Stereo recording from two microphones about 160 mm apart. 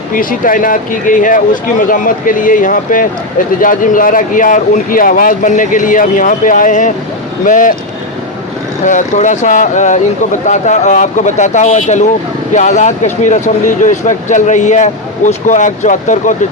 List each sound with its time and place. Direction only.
0.1 s speech: 60° left (ahead or behind)
8.8 s speech: 50° left (ahead or behind)